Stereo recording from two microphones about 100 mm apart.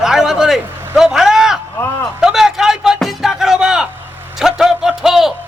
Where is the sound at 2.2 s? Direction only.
5° right (ahead or behind).